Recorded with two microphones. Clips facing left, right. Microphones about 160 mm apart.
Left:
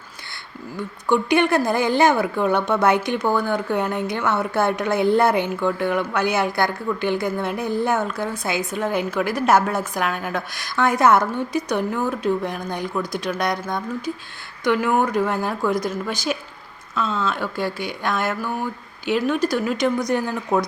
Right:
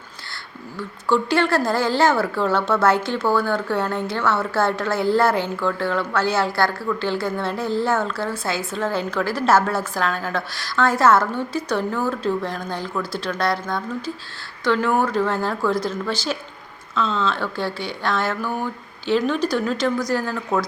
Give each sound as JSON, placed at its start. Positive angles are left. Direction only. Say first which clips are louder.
{"t": 0.8, "sound": "speech", "louder": "even", "side_deg": 15}